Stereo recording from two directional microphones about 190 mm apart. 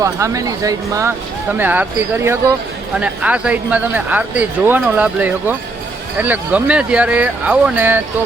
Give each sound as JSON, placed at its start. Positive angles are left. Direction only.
{"t": 0.0, "sound": "speech", "side_deg": -15}